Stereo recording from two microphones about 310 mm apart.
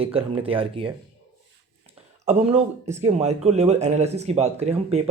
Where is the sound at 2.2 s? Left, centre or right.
Right.